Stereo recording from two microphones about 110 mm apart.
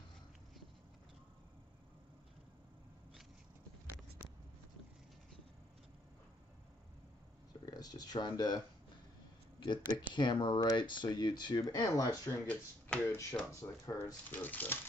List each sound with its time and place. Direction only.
7.6 s speech: 40° left (ahead or behind)
12.3 s speech: 15° left (ahead or behind)
14.4 s speech: 15° left (ahead or behind)